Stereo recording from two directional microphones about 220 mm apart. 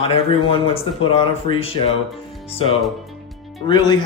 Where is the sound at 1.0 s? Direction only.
25° left (ahead or behind).